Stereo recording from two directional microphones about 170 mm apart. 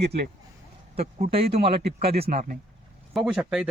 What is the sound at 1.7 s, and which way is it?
Speech, 65° right (ahead or behind).